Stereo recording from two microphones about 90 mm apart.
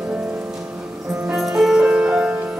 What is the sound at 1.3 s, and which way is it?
Music, 5° right (ahead or behind).